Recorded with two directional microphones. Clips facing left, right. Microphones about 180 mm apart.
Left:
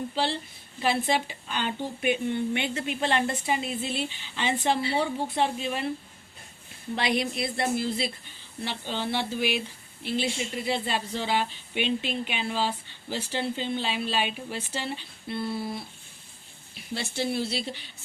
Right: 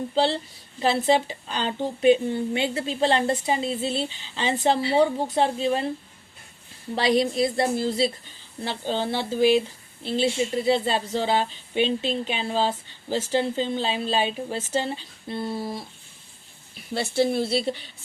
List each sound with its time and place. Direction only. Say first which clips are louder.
0.1 s a woman's voice: right 6 dB; 25° right (ahead or behind)
7.0 s a woman's voice: right 7 dB; 35° right (ahead or behind)
17.2 s a woman's voice: right 5 dB; 50° right (ahead or behind)